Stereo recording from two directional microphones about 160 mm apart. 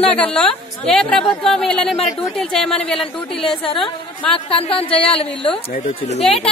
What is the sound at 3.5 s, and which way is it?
Speech, 30° left (ahead or behind).